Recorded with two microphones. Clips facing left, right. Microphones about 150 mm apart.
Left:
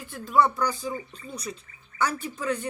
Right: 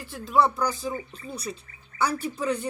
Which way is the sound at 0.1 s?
5° right (ahead or behind).